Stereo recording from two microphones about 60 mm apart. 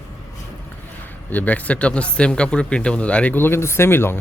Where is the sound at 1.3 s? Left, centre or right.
Left.